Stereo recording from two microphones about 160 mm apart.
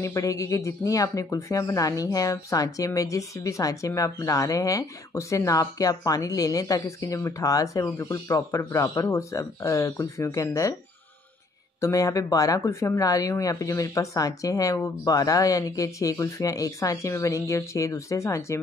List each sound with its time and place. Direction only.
0.0 s speech: 20° left (ahead or behind)
11.8 s speech: 20° left (ahead or behind)